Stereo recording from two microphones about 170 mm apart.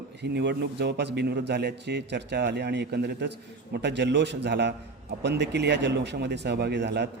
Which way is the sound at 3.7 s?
90° right.